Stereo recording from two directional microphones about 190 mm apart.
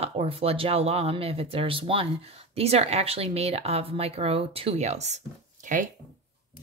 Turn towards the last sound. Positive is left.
turn(degrees=-45)  # may be behind; listen again after turning